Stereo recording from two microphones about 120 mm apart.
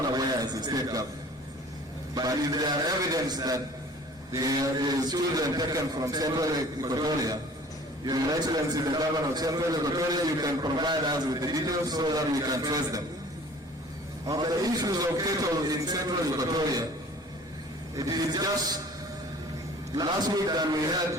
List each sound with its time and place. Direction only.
0.1 s a sound: 35° right (ahead or behind)
2.1 s a man's voice: 35° right (ahead or behind)
14.3 s a man's voice: 30° right (ahead or behind)
17.9 s a man's voice: 30° right (ahead or behind)
20.0 s a man's voice: 35° right (ahead or behind)